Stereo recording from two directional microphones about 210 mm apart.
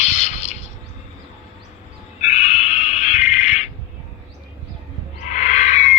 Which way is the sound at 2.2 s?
35° left (ahead or behind).